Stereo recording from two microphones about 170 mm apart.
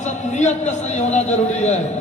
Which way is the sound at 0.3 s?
45° left (ahead or behind).